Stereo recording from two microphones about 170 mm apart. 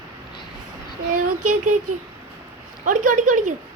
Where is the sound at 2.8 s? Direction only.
50° right (ahead or behind).